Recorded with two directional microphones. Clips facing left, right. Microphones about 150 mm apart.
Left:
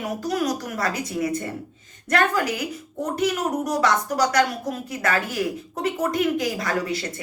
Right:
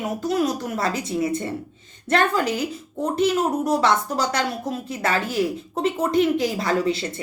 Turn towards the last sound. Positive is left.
turn(degrees=-25)  # may be behind; listen again after turning